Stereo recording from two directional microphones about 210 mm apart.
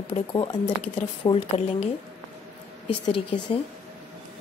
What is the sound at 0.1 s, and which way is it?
Speech, 20° left (ahead or behind).